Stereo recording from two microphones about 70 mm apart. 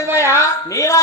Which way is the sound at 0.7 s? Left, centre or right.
Left.